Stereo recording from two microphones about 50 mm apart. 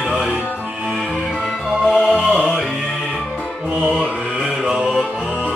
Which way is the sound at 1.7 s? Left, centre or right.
Centre.